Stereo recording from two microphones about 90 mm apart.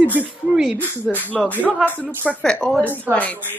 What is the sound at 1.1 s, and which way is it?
A man's voice, 20° left (ahead or behind).